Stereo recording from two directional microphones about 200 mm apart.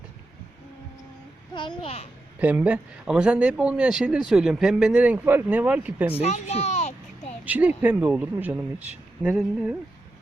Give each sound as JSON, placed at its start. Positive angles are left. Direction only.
{"t": 1.5, "sound": "a child's voice", "side_deg": 25}
{"t": 2.4, "sound": "speech", "side_deg": -10}
{"t": 6.1, "sound": "a sound", "side_deg": 35}
{"t": 7.4, "sound": "speech", "side_deg": -5}